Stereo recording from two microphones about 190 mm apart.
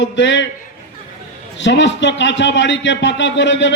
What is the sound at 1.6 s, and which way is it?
A man's voice, 70° left (ahead or behind).